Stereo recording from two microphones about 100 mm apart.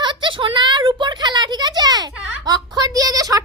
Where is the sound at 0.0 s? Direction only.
50° right (ahead or behind).